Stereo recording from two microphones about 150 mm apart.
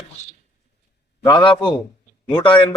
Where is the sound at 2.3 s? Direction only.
30° left (ahead or behind).